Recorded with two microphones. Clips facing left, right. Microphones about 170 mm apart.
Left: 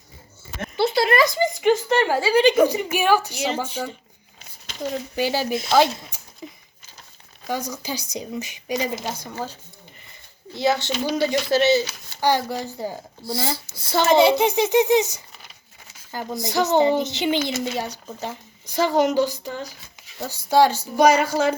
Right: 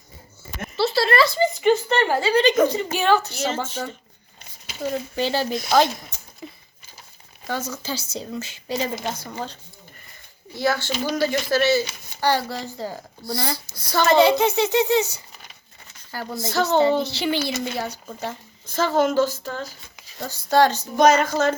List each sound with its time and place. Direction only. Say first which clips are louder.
0.8 s speech: left 1 dB; 15° left (ahead or behind)
4.6 s a sound: right 1 dB; 5° right (ahead or behind)
5.1 s speech: left 2 dB; 10° left (ahead or behind)
6.1 s a sound: even; 15° left (ahead or behind)
7.4 s speech: left 1 dB; 15° left (ahead or behind)
10.5 s speech: left 2 dB; 20° left (ahead or behind)
10.9 s speech: left 1 dB; centre (ahead or behind)
11.5 s speech: left 2 dB; 20° left (ahead or behind)